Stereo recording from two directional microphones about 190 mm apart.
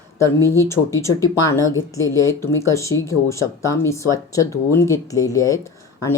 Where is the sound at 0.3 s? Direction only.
15° left (ahead or behind).